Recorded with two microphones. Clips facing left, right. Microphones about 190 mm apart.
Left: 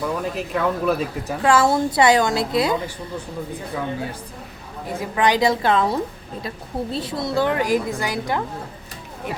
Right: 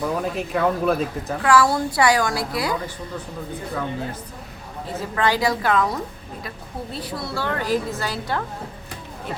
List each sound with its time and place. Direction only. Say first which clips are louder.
0.0 s speech: even; centre (ahead or behind)
1.4 s a woman's voice: left 1 dB; 25° left (ahead or behind)
4.9 s a woman's voice: left 2 dB; 15° left (ahead or behind)